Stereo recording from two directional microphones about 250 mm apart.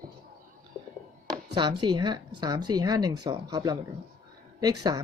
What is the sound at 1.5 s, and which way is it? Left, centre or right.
Speech, centre.